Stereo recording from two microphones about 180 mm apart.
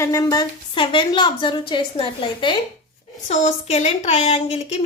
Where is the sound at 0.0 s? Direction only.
15° left (ahead or behind).